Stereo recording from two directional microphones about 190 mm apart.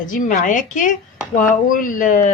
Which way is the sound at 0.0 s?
45° left (ahead or behind).